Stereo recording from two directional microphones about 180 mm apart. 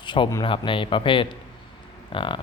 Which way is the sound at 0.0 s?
25° left (ahead or behind).